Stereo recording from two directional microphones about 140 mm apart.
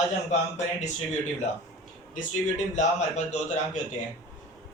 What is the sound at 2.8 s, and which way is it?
A man's voice, 55° left (ahead or behind).